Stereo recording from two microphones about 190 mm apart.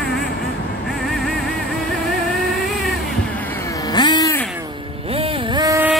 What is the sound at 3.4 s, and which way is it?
Vehicle, 15° left (ahead or behind).